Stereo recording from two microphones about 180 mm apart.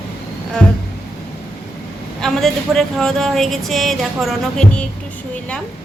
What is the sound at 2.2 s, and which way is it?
A man's voice, centre (ahead or behind).